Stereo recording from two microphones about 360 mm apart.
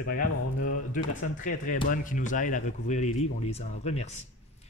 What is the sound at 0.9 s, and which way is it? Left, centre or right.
Speech, left.